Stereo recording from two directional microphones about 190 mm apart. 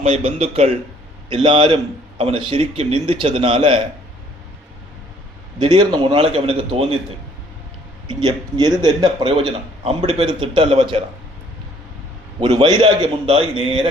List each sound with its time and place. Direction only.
0.0 s a man's voice: 35° right (ahead or behind)
5.6 s a man's voice: 25° right (ahead or behind)
8.0 s a man's voice: 25° right (ahead or behind)
12.4 s a man's voice: 25° right (ahead or behind)